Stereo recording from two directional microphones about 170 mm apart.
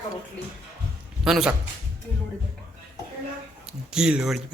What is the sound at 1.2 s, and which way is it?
Speech, 5° right (ahead or behind).